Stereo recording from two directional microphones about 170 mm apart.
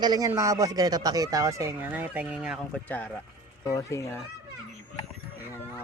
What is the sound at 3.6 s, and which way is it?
Speech, 20° left (ahead or behind).